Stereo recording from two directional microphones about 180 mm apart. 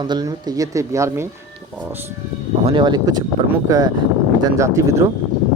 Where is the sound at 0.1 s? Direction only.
20° right (ahead or behind).